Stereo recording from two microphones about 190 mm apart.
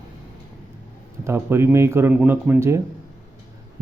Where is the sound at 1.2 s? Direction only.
15° right (ahead or behind).